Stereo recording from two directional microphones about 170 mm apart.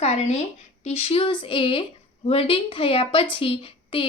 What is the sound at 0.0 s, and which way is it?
A woman's voice, 40° left (ahead or behind).